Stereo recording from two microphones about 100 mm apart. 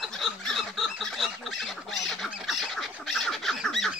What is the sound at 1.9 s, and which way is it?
Bird, centre (ahead or behind).